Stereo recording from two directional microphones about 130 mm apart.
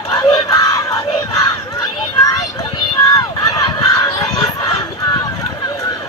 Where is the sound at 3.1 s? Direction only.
30° left (ahead or behind).